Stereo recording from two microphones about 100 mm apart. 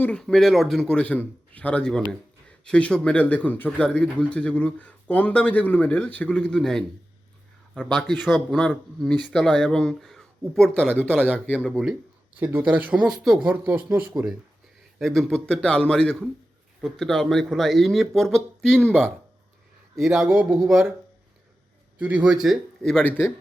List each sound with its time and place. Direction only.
0.2 s speech: 5° left (ahead or behind)
7.9 s speech: 5° right (ahead or behind)
11.7 s speech: 10° right (ahead or behind)
14.9 s speech: centre (ahead or behind)
20.0 s speech: 5° right (ahead or behind)
21.9 s speech: 10° right (ahead or behind); by 23.0 s 5° left (ahead or behind)
23.0 s speech: 25° left (ahead or behind)